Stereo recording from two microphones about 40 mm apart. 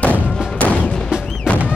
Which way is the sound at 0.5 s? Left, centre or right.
Left.